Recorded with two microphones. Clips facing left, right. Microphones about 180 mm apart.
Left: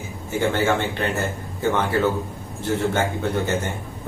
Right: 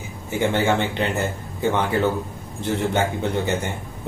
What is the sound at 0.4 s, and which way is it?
A man's voice, 20° right (ahead or behind).